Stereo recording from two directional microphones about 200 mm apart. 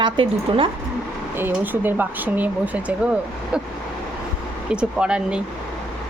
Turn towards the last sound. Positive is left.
turn(degrees=-5)  # may be behind; listen again after turning